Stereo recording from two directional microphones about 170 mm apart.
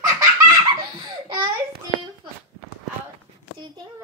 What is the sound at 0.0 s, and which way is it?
Baby laughter, 20° right (ahead or behind).